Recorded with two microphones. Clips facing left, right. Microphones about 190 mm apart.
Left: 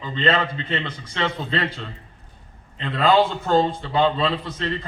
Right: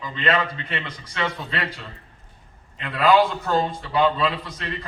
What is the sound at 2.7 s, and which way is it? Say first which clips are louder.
A man's voice: even; 30° left (ahead or behind).